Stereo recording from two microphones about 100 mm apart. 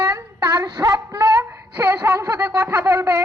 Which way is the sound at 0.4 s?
35° right (ahead or behind).